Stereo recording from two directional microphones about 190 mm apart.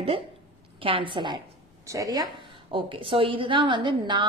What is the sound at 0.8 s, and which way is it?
A woman's voice, 25° right (ahead or behind).